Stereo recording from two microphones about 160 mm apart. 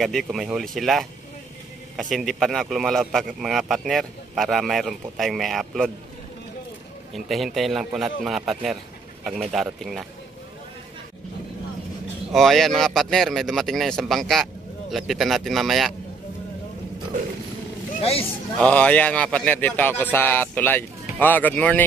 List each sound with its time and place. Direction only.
0.0 s speech: centre (ahead or behind)
7.2 s speech: centre (ahead or behind)
12.3 s speech: centre (ahead or behind)
18.0 s a man's voice: 40° left (ahead or behind)
18.6 s speech: 10° left (ahead or behind)